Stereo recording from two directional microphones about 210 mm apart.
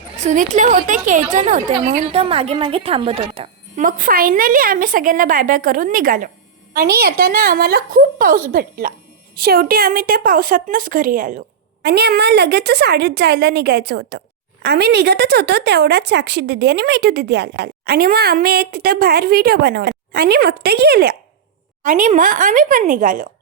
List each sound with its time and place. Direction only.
0.2 s a woman's voice: 35° right (ahead or behind)
3.8 s a woman's voice: 40° right (ahead or behind)
11.8 s a woman's voice: 50° right (ahead or behind)